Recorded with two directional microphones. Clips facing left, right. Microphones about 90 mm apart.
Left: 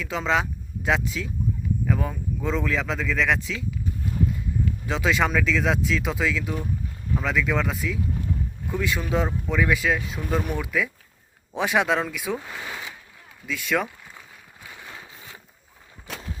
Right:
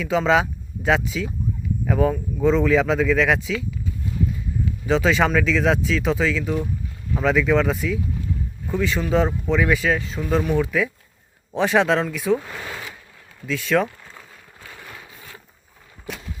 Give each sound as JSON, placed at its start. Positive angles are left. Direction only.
{"t": 0.0, "sound": "speech", "side_deg": 0}
{"t": 4.9, "sound": "speech", "side_deg": 0}
{"t": 14.6, "sound": "a sound", "side_deg": 15}